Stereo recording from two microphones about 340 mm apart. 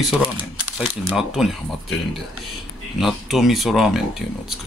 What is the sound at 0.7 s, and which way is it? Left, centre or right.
Speech, centre.